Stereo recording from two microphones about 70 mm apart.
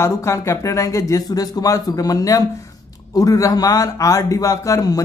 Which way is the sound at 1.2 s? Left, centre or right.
Left.